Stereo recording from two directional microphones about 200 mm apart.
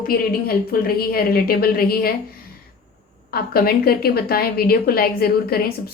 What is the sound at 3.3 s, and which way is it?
Speech, 50° left (ahead or behind).